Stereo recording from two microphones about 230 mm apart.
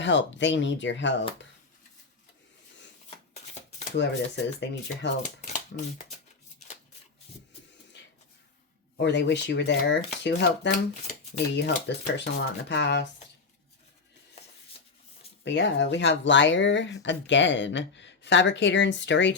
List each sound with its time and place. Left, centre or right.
0.0 s speech: left
3.3 s shuffling cards: left
3.9 s speech: left
5.4 s speech: left
8.0 s a sound: left
9.0 s speech: left
14.4 s a sound: left
15.4 s speech: left